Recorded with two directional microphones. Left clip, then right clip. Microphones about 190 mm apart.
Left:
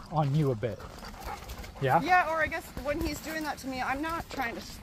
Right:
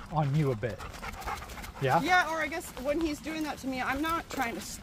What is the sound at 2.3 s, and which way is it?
Speech, 45° right (ahead or behind).